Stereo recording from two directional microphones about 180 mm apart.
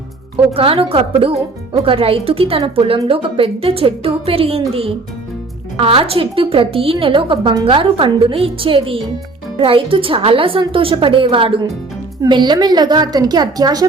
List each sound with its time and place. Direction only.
0.5 s a woman's voice: 30° right (ahead or behind)